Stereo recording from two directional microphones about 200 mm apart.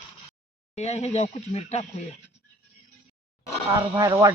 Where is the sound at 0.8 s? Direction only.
35° left (ahead or behind).